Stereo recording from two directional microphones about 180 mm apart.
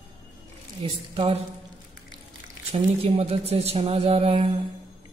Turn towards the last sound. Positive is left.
turn(degrees=-35)  # may be behind; listen again after turning